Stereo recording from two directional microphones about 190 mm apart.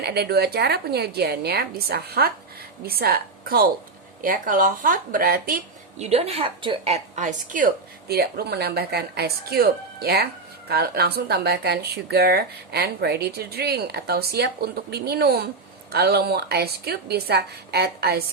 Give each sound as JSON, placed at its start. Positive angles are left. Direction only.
{"t": 0.0, "sound": "a woman's voice", "side_deg": -60}
{"t": 6.0, "sound": "a woman's voice", "side_deg": -35}